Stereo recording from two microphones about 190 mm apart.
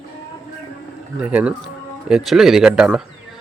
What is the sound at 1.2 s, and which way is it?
A man's voice, 5° right (ahead or behind).